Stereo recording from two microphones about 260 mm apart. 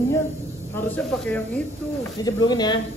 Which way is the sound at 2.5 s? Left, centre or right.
Centre.